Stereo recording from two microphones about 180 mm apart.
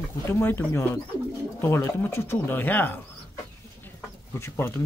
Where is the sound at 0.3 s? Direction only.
10° left (ahead or behind).